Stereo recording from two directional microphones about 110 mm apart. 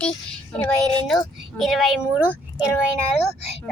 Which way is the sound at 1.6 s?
Centre (ahead or behind).